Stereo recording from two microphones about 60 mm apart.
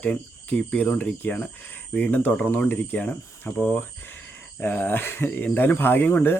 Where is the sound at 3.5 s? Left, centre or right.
Left.